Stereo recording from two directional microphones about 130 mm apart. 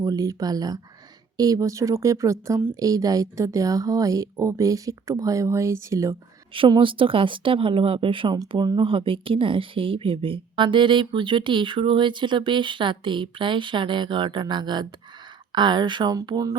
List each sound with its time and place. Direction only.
0.0 s speech: 25° right (ahead or behind)
6.5 s speech: 40° right (ahead or behind)